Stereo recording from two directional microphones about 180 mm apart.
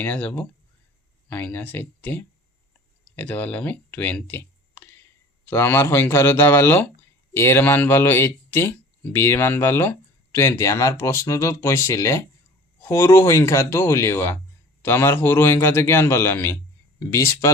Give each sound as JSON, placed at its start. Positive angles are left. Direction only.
{"t": 0.0, "sound": "speech", "side_deg": 10}